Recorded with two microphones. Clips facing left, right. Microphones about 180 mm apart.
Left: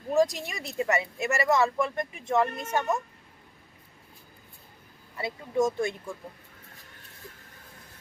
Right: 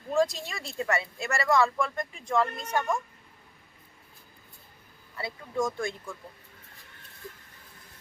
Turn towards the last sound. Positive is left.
turn(degrees=25)  # may be behind; listen again after turning